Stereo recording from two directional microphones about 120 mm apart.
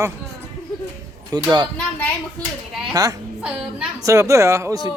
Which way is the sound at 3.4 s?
10° right (ahead or behind).